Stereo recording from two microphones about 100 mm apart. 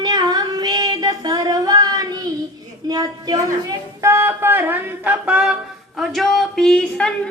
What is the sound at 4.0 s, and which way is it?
Music, 25° right (ahead or behind).